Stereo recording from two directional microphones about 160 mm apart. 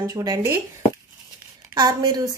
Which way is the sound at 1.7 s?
25° right (ahead or behind).